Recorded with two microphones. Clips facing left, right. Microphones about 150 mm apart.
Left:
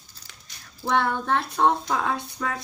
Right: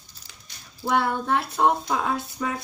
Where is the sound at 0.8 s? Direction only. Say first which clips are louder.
Even; 5° right (ahead or behind).